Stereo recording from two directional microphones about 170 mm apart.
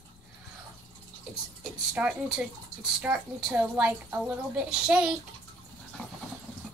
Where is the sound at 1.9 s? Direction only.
5° right (ahead or behind).